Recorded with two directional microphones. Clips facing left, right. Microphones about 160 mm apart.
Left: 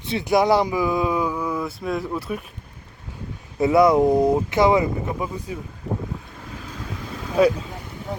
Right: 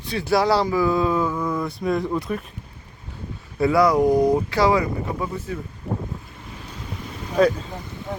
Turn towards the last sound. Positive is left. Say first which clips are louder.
# left 1 dB
turn(degrees=10)  # may be behind; listen again after turning